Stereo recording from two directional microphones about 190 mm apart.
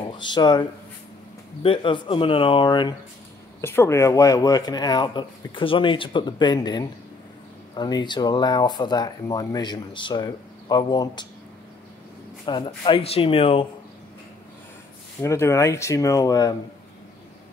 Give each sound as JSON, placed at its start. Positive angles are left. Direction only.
{"t": 0.2, "sound": "speech", "side_deg": 25}
{"t": 3.6, "sound": "speech", "side_deg": 15}
{"t": 12.4, "sound": "speech", "side_deg": 25}
{"t": 15.2, "sound": "speech", "side_deg": 15}